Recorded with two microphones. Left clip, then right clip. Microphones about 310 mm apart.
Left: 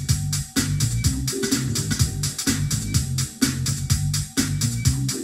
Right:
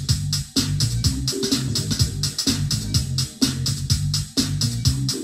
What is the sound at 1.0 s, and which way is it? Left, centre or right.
Music, centre.